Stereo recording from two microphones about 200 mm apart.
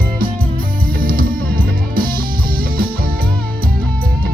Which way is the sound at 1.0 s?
45° right (ahead or behind).